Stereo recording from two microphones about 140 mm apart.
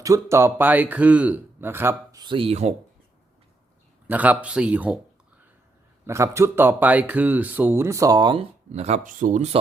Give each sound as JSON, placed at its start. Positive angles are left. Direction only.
{"t": 0.0, "sound": "speech", "side_deg": -20}
{"t": 2.2, "sound": "speech", "side_deg": -40}
{"t": 4.0, "sound": "speech", "side_deg": -10}
{"t": 6.1, "sound": "speech", "side_deg": -20}
{"t": 8.7, "sound": "speech", "side_deg": -50}